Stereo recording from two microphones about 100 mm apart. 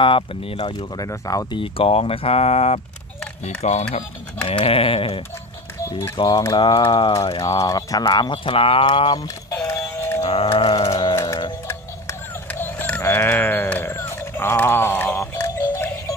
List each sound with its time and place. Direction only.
0.0 s speech: 65° left (ahead or behind)
0.6 s speech: 45° left (ahead or behind)
1.5 s speech: 65° left (ahead or behind); by 4.0 s 90° left
4.5 s a sound: 70° left (ahead or behind)
5.9 s a sound: 25° left (ahead or behind)
6.1 s speech: 40° left (ahead or behind)
6.5 s speech: 55° left (ahead or behind)
7.3 s speech: 40° left (ahead or behind); by 9.2 s 60° left (ahead or behind)
9.5 s music: 30° left (ahead or behind)
10.2 s a sound: 75° left (ahead or behind)
12.4 s a sound: 20° left (ahead or behind)
13.9 s music: 25° left (ahead or behind)